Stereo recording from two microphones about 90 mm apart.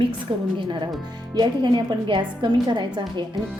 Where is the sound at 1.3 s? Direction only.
55° right (ahead or behind).